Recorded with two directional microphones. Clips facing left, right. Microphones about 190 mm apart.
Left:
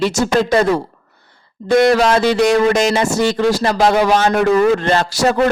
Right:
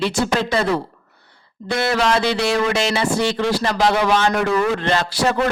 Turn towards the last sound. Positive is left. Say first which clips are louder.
# left 4 dB
turn(degrees=45)  # may be behind; listen again after turning